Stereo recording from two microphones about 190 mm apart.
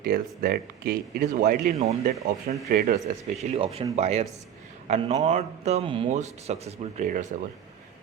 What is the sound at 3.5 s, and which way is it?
A man's voice, 30° right (ahead or behind).